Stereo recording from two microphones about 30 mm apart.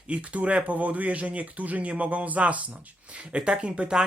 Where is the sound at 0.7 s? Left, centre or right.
Right.